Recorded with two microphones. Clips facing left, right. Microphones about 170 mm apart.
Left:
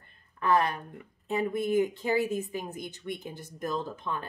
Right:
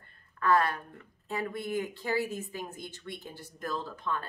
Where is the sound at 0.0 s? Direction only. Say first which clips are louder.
Even; 20° left (ahead or behind).